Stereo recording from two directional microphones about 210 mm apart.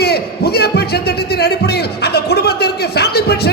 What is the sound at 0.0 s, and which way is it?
A man's voice, 50° left (ahead or behind).